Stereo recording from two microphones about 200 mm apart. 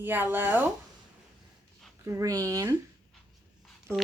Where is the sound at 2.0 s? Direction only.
15° right (ahead or behind).